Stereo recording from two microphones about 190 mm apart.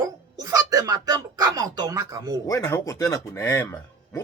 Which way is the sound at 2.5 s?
15° left (ahead or behind).